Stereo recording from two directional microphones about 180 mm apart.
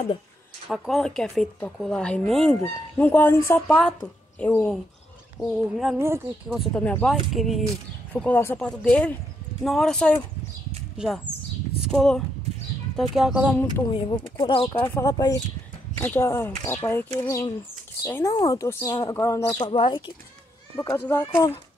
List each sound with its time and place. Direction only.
0.7 s speech: centre (ahead or behind)
5.9 s speech: 15° right (ahead or behind)
6.5 s speech: 5° left (ahead or behind)
13.8 s speech: 25° left (ahead or behind)
14.7 s speech: 15° left (ahead or behind)
19.6 s speech: 30° left (ahead or behind)
20.7 s speech: 15° left (ahead or behind)